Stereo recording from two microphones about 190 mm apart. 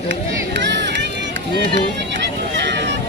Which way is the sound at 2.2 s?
65° right (ahead or behind).